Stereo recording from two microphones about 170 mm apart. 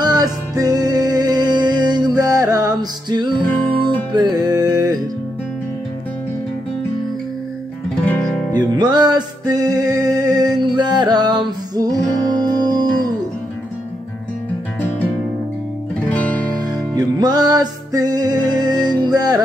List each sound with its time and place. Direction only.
0.0 s music: 25° right (ahead or behind)
8.0 s music: 10° left (ahead or behind)
8.7 s music: 25° right (ahead or behind)
14.8 s music: 10° left (ahead or behind)
16.5 s music: 25° right (ahead or behind)